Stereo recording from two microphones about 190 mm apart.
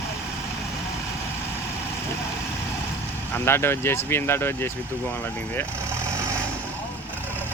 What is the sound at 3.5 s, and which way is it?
Speech, 15° left (ahead or behind).